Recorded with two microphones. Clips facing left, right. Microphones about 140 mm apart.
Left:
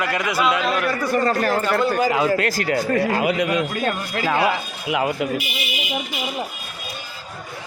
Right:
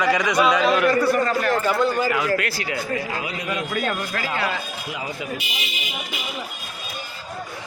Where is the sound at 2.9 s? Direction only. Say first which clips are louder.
Left 9 dB; 60° left (ahead or behind).